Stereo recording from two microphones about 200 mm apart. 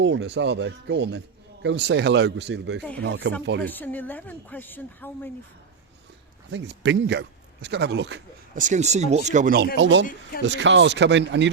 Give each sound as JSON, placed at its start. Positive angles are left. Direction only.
{"t": 0.0, "sound": "a man's voice", "side_deg": -60}
{"t": 3.6, "sound": "speech", "side_deg": 10}
{"t": 6.5, "sound": "a man's voice", "side_deg": -60}
{"t": 8.5, "sound": "speech", "side_deg": -40}
{"t": 9.7, "sound": "a man's voice", "side_deg": -65}